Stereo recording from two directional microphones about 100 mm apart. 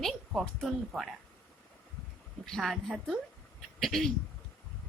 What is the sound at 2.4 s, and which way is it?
Speech, 5° left (ahead or behind).